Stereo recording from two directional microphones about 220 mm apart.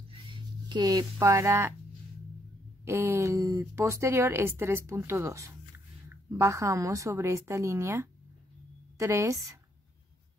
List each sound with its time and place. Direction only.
0.3 s speech: 20° right (ahead or behind)
2.8 s speech: 10° right (ahead or behind)